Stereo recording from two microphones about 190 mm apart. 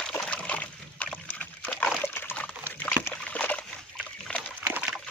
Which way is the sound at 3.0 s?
5° left (ahead or behind).